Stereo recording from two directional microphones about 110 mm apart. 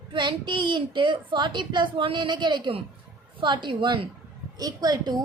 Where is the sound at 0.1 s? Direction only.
45° right (ahead or behind).